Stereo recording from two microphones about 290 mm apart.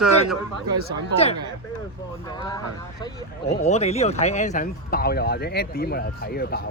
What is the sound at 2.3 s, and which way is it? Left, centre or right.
Speech, centre.